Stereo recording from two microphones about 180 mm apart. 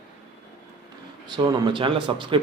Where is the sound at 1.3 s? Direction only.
25° right (ahead or behind).